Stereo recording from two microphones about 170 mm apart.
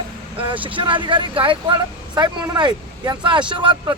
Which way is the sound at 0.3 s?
30° right (ahead or behind).